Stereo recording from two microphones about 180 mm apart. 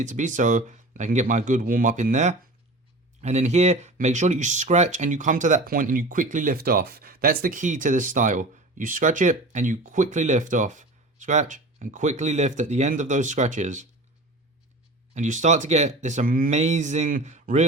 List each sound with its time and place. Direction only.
0.0 s speech: 45° right (ahead or behind)
15.1 s speech: 40° right (ahead or behind)